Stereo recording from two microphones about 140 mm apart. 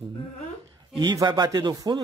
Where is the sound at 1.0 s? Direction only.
25° right (ahead or behind).